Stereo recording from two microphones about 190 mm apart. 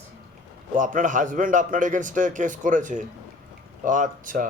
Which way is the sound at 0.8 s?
40° right (ahead or behind).